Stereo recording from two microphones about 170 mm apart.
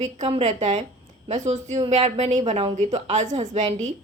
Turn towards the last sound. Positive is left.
turn(degrees=-45)  # may be behind; listen again after turning